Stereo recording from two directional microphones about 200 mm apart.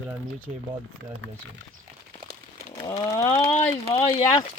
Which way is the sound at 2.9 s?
15° left (ahead or behind).